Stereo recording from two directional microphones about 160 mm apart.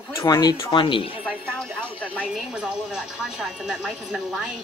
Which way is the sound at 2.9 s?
5° right (ahead or behind).